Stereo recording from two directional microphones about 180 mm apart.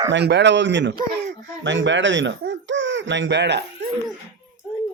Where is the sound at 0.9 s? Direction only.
70° right (ahead or behind).